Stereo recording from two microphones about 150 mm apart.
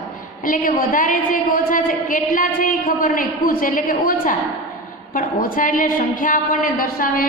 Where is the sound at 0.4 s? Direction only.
65° left (ahead or behind).